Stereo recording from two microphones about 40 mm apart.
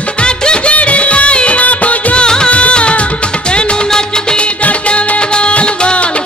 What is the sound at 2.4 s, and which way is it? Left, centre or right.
Music, left.